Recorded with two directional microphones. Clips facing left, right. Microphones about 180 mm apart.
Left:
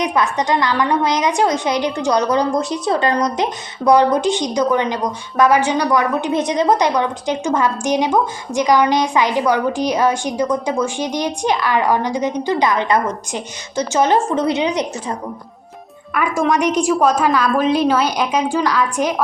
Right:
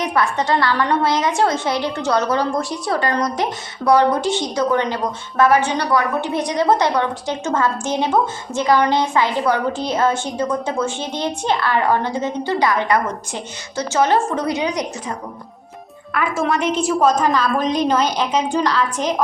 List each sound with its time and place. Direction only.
0.0 s a woman's voice: 15° left (ahead or behind)
16.1 s a woman's voice: 15° left (ahead or behind)